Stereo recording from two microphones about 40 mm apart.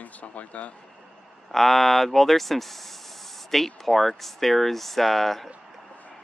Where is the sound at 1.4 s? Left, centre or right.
Centre.